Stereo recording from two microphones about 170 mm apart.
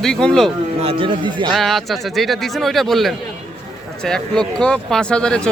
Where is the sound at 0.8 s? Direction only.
30° right (ahead or behind).